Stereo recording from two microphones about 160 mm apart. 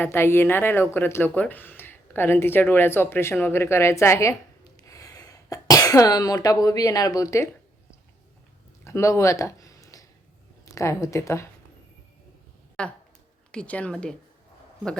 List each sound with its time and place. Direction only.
0.0 s a woman's voice: 15° left (ahead or behind)
8.8 s a sound: 20° left (ahead or behind)
10.8 s a woman's voice: 20° left (ahead or behind)
12.8 s a woman's voice: 5° left (ahead or behind)